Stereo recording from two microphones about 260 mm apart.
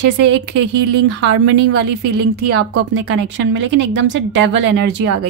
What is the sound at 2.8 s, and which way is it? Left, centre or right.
A woman's voice, right.